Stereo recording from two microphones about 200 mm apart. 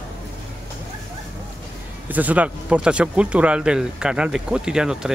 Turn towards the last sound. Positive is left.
turn(degrees=-5)  # may be behind; listen again after turning